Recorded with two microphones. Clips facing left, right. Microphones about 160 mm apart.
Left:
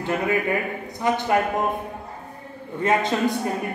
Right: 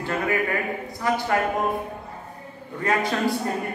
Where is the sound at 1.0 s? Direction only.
20° left (ahead or behind).